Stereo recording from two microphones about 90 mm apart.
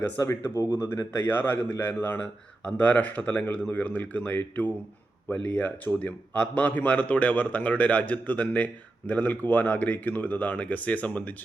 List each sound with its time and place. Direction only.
0.2 s speech: 40° left (ahead or behind)
0.8 s a man's voice: 25° left (ahead or behind)